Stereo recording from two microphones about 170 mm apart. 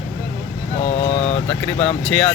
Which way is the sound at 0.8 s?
40° left (ahead or behind).